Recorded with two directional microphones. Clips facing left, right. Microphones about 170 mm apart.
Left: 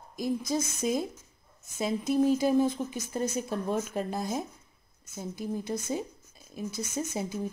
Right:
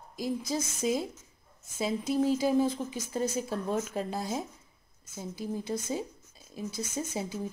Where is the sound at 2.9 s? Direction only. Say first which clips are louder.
Even; 10° right (ahead or behind).